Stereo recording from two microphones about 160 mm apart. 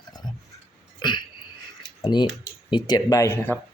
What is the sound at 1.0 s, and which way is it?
Hiccup, 30° left (ahead or behind).